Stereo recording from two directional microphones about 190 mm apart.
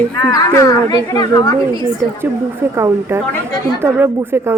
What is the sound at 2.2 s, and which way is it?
Speech, 15° right (ahead or behind).